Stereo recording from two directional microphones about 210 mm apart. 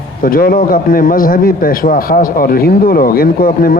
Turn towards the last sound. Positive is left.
turn(degrees=45)  # may be behind; listen again after turning